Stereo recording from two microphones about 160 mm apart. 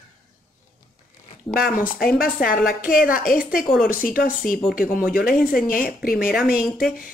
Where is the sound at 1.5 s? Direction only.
70° left (ahead or behind).